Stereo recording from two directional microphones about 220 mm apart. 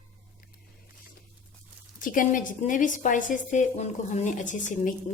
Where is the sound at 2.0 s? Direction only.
35° left (ahead or behind).